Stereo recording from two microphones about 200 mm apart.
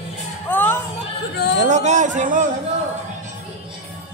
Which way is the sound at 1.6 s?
35° right (ahead or behind).